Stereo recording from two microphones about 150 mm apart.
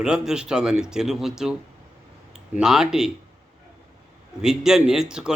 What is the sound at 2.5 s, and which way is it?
Speech, 5° right (ahead or behind).